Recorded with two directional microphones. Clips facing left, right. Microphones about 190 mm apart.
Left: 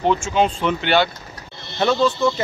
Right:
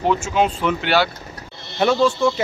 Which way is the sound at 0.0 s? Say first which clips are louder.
Even; 5° right (ahead or behind).